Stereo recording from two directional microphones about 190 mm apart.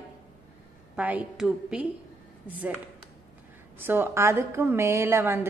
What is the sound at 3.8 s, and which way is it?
A woman's voice, 10° right (ahead or behind).